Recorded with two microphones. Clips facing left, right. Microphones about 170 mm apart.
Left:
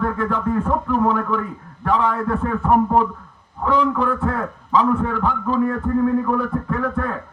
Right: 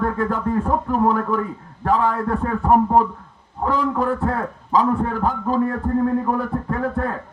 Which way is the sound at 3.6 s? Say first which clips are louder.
Left 1 dB; 40° right (ahead or behind).